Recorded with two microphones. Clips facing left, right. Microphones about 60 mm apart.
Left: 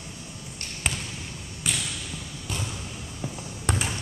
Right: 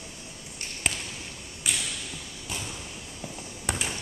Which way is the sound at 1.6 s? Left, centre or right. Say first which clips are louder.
Left 1 dB; centre.